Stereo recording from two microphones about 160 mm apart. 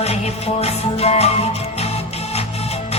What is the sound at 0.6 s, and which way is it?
Music, 40° left (ahead or behind).